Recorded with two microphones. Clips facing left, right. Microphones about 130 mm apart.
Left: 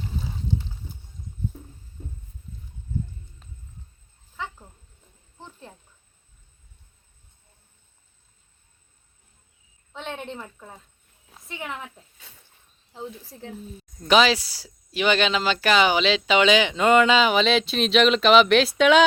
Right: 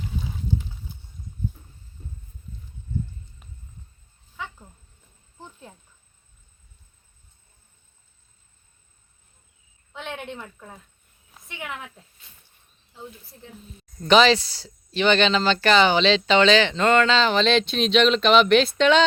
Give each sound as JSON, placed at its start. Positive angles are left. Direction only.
{"t": 9.9, "sound": "a sound", "side_deg": 35}
{"t": 11.4, "sound": "speech", "side_deg": 35}
{"t": 14.0, "sound": "speech", "side_deg": 5}